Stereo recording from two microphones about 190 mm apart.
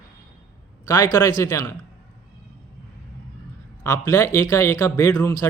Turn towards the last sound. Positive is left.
turn(degrees=20)  # may be behind; listen again after turning